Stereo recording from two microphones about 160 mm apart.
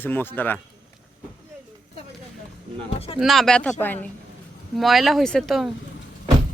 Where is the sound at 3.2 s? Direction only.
Centre (ahead or behind).